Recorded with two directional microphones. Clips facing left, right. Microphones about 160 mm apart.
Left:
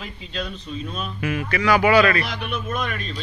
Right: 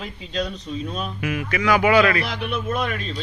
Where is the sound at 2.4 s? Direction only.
30° right (ahead or behind).